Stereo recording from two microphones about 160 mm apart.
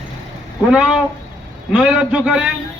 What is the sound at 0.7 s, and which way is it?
A man's voice, 5° right (ahead or behind).